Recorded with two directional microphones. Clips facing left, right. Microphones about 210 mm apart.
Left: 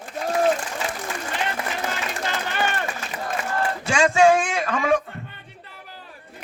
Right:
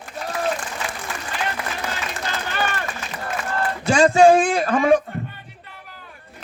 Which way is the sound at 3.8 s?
35° right (ahead or behind).